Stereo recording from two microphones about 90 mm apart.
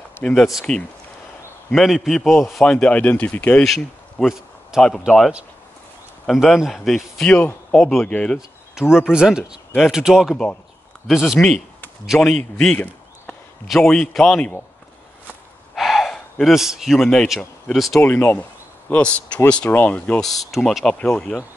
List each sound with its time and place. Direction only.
0.2 s a man's voice: 10° left (ahead or behind)
3.6 s a sound: centre (ahead or behind)
4.8 s a man's voice: 5° left (ahead or behind)
7.2 s speech: 25° left (ahead or behind)
7.7 s a man's voice: 5° left (ahead or behind)
8.7 s a man's voice: 5° right (ahead or behind)
12.7 s a sound: 20° left (ahead or behind)
13.7 s a man's voice: 10° left (ahead or behind)
15.7 s gasp: centre (ahead or behind)
17.4 s speech: centre (ahead or behind)
18.0 s a man's voice: 25° left (ahead or behind)
20.2 s speech: centre (ahead or behind)